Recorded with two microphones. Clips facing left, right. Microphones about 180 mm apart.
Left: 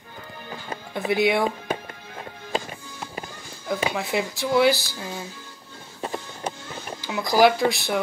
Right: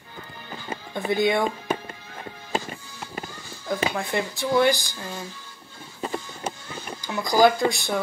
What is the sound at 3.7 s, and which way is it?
Speech, 5° left (ahead or behind).